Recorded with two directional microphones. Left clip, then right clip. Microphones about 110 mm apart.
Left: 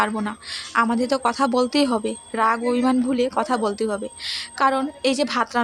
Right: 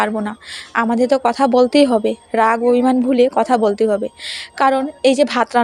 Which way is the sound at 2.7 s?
25° right (ahead or behind).